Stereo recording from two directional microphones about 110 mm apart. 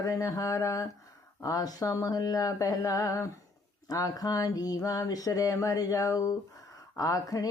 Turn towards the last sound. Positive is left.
turn(degrees=35)  # may be behind; listen again after turning